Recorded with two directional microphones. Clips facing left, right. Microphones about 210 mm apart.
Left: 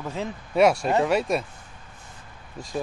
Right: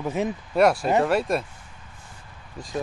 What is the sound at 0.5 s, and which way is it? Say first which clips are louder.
Speech: even; centre (ahead or behind).